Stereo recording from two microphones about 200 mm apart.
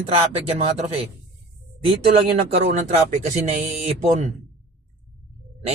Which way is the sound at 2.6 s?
35° right (ahead or behind).